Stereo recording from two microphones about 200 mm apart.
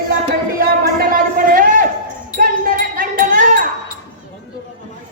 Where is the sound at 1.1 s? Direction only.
45° right (ahead or behind).